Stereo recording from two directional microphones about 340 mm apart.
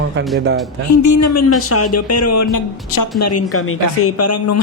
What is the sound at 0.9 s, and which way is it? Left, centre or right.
Speech, left.